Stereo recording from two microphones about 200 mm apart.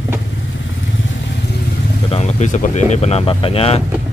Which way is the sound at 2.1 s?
35° left (ahead or behind).